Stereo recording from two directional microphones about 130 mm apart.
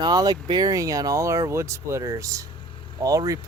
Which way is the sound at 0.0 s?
30° right (ahead or behind).